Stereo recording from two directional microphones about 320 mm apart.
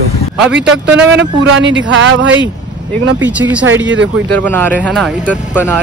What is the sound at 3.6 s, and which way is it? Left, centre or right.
Speech, right.